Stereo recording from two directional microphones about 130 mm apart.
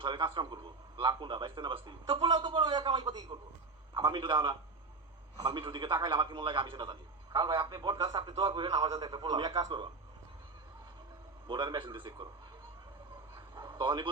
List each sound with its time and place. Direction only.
0.0 s a man's voice: 35° right (ahead or behind)
11.4 s a man's voice: 35° right (ahead or behind)
13.3 s bow-wow: 35° right (ahead or behind)